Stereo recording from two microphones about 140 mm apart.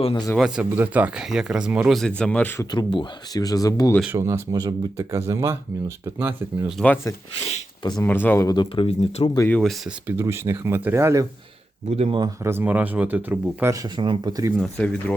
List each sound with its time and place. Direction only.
0.0 s speech: 35° left (ahead or behind)
0.3 s speech: 5° right (ahead or behind); by 2.6 s 15° left (ahead or behind)
2.7 s speech: 35° left (ahead or behind)
4.0 s speech: 15° right (ahead or behind)
6.8 s speech: 15° left (ahead or behind)
8.4 s speech: 35° left (ahead or behind)
9.5 s speech: 5° left (ahead or behind)
10.1 s speech: 15° right (ahead or behind)
11.9 s speech: 50° right (ahead or behind)
12.4 s speech: 15° right (ahead or behind)
13.8 s speech: 35° right (ahead or behind)
14.6 s speech: 10° left (ahead or behind)